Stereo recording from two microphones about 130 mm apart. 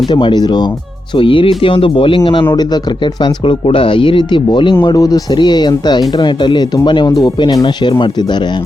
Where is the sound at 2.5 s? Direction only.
30° left (ahead or behind).